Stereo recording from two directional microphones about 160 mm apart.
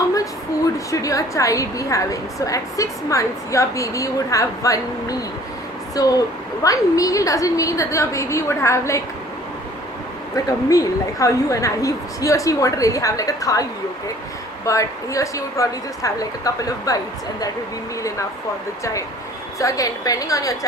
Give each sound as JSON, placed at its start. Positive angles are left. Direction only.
{"t": 0.9, "sound": "a woman's voice", "side_deg": 20}
{"t": 10.3, "sound": "a woman's voice", "side_deg": 20}
{"t": 19.5, "sound": "a woman's voice", "side_deg": 20}